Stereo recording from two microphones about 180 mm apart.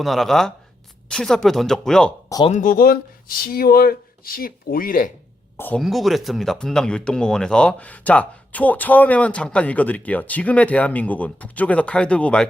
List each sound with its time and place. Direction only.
0.0 s speech: centre (ahead or behind)
2.5 s speech: 45° left (ahead or behind)
5.5 s speech: 10° left (ahead or behind)
5.8 s speech: centre (ahead or behind)